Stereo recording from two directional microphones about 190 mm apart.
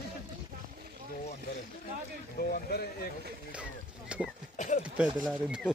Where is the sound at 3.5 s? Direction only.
5° right (ahead or behind).